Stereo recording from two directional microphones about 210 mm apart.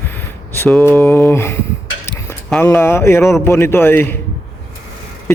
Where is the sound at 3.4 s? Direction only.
10° left (ahead or behind).